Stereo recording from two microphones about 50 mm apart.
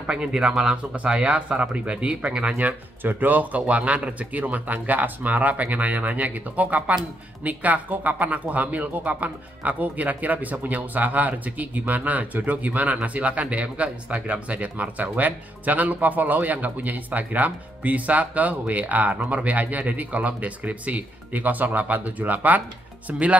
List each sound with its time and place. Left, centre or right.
0.0 s speech: centre
2.6 s speech: right